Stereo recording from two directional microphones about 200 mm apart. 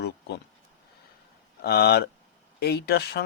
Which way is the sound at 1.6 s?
55° left (ahead or behind).